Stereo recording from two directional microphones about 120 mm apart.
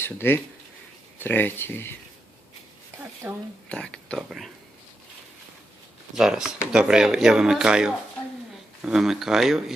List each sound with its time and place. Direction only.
0.0 s speech: 20° left (ahead or behind)
3.2 s speech: 15° right (ahead or behind)
3.7 s speech: 10° left (ahead or behind)
6.1 s speech: 5° right (ahead or behind)